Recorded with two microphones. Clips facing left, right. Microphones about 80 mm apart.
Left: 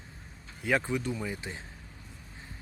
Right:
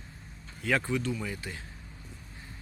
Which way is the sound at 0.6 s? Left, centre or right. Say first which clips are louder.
Even; centre.